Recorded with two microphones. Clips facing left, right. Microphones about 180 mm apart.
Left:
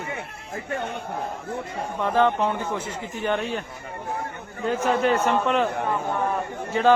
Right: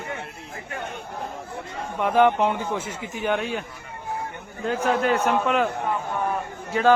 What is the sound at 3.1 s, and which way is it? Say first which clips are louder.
Speech: right 1 dB; 5° right (ahead or behind).